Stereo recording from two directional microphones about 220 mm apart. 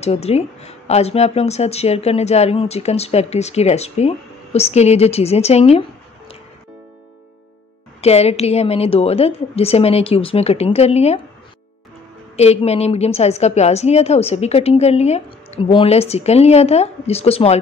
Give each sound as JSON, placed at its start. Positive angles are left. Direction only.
{"t": 0.0, "sound": "a woman's voice", "side_deg": 30}
{"t": 8.0, "sound": "a woman's voice", "side_deg": 30}
{"t": 12.4, "sound": "a woman's voice", "side_deg": 30}